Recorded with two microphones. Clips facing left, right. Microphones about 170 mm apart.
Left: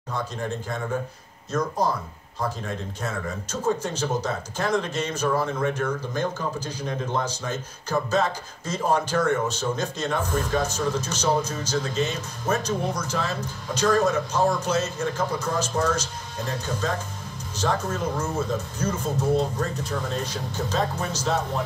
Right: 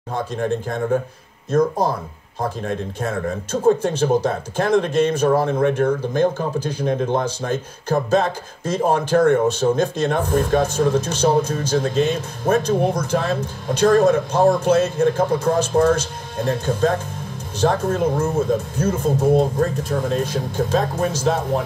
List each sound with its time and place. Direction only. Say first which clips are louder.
0.1 s speech: right 7 dB; 50° right (ahead or behind)